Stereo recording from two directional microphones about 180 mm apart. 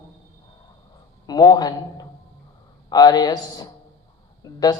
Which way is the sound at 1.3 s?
20° left (ahead or behind).